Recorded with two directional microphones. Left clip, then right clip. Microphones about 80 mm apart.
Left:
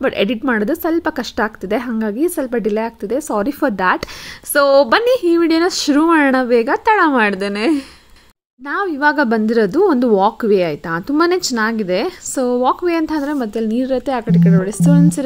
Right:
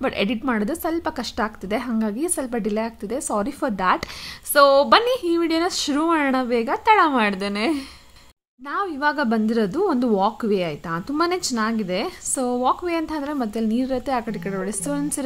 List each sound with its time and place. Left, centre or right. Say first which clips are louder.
0.0 s a woman's voice: left 6 dB; left
4.6 s a woman's voice: left 3 dB; left